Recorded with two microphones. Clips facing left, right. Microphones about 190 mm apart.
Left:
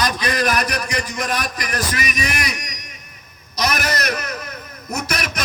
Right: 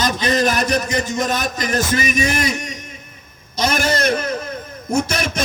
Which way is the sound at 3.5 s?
25° right (ahead or behind).